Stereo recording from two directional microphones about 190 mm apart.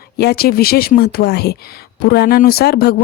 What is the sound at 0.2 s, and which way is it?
Speech, 55° left (ahead or behind).